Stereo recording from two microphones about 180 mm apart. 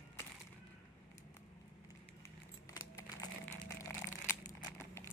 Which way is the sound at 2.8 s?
20° left (ahead or behind).